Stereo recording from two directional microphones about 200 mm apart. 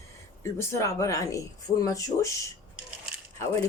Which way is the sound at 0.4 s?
15° left (ahead or behind).